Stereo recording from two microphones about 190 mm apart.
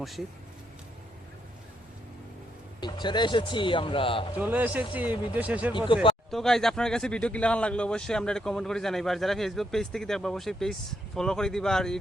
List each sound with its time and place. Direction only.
2.8 s speech: 25° left (ahead or behind)
4.4 s speech: 10° right (ahead or behind)
5.7 s speech: 25° left (ahead or behind)
6.3 s speech: 5° left (ahead or behind)